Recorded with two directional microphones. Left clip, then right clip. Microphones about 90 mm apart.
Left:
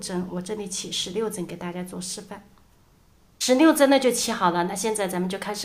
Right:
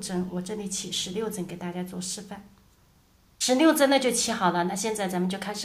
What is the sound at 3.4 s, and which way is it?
A woman's voice, 30° left (ahead or behind).